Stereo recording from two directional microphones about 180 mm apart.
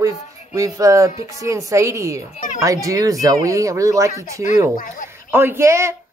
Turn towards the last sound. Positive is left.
turn(degrees=-15)  # may be behind; listen again after turning